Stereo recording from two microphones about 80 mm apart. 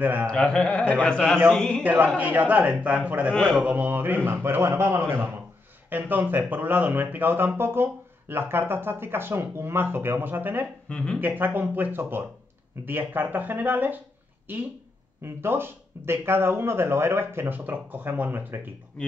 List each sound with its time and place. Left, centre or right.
0.0 s speech: right
0.3 s music: centre
1.8 s speech: right
10.9 s music: centre
11.1 s speech: right